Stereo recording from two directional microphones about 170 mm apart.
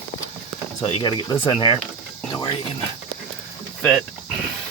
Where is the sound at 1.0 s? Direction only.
30° left (ahead or behind).